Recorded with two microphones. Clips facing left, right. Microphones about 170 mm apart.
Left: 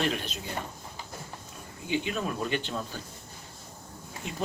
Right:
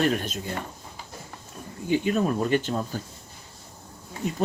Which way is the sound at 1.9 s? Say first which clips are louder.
Right 7 dB; 45° right (ahead or behind).